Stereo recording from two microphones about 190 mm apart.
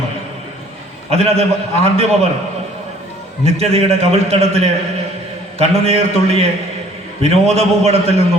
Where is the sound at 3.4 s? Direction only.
35° right (ahead or behind).